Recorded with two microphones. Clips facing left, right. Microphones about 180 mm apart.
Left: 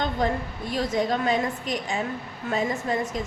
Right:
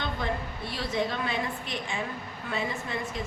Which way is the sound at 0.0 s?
45° left (ahead or behind).